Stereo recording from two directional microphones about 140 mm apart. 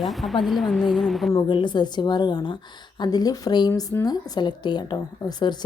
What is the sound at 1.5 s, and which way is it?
A woman's voice, 35° left (ahead or behind).